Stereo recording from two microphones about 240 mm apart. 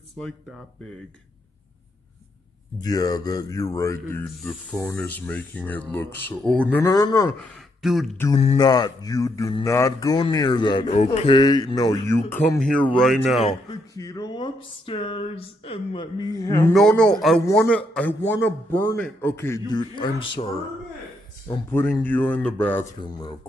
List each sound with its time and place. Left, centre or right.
0.2 s speech: centre
2.8 s speech: centre
4.4 s speech: centre
7.5 s speech: centre
8.5 s speech: centre
13.5 s speech: centre
21.5 s speech: centre
22.9 s speech: centre